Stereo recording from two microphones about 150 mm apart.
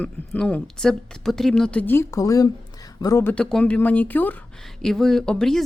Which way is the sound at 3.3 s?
5° left (ahead or behind).